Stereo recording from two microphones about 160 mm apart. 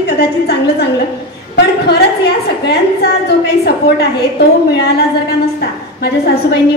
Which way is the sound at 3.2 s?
90° left.